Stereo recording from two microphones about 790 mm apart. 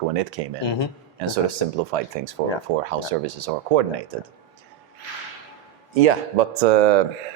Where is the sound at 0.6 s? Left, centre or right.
Left.